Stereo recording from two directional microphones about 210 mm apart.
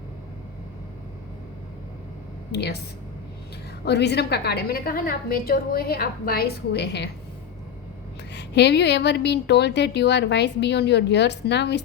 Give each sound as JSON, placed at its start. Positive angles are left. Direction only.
{"t": 2.5, "sound": "speech", "side_deg": 50}
{"t": 3.8, "sound": "a woman's voice", "side_deg": 50}
{"t": 8.3, "sound": "a woman's voice", "side_deg": 55}